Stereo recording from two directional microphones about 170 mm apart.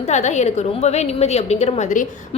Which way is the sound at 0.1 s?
40° left (ahead or behind).